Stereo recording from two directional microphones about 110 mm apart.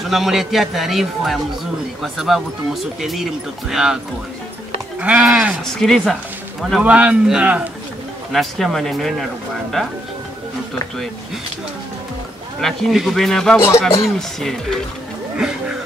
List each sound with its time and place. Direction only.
0.1 s speech: centre (ahead or behind)
5.0 s speech: 10° right (ahead or behind)
5.8 s speech: 5° left (ahead or behind)
6.8 s speech: 10° right (ahead or behind)
8.3 s speech: centre (ahead or behind)
12.5 s speech: centre (ahead or behind)
13.6 s speech: 25° left (ahead or behind)
14.0 s speech: centre (ahead or behind)